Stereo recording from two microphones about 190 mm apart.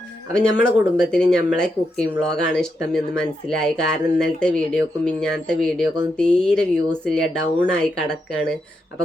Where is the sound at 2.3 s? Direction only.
60° left (ahead or behind).